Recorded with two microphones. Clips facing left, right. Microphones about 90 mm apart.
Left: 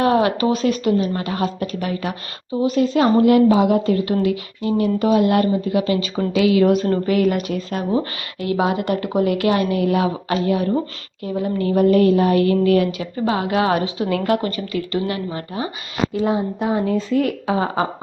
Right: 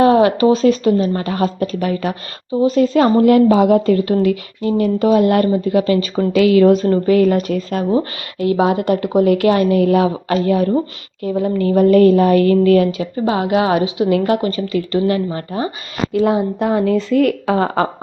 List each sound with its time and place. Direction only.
0.0 s a woman's voice: 30° right (ahead or behind); by 6.7 s 50° right (ahead or behind)
6.7 s a woman's voice: 30° right (ahead or behind)
8.4 s a woman's voice: 30° right (ahead or behind)
16.1 s speech: 65° right (ahead or behind)